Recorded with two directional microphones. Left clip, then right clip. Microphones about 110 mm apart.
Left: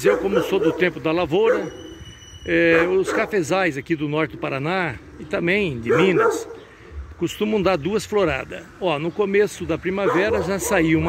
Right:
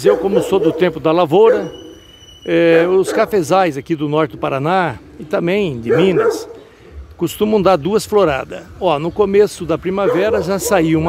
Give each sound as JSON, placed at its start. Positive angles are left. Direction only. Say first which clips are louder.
{"t": 0.0, "sound": "speech", "louder": "right 5 dB", "side_deg": -30}